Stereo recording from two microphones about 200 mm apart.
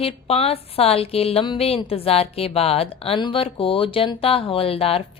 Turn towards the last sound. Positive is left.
turn(degrees=30)  # may be behind; listen again after turning